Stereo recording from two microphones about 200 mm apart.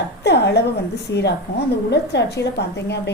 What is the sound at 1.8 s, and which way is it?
A woman's voice, 55° left (ahead or behind).